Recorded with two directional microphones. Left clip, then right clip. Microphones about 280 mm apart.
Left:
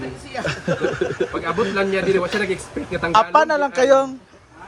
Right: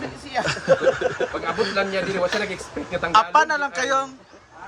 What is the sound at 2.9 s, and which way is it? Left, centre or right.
A man's voice, centre.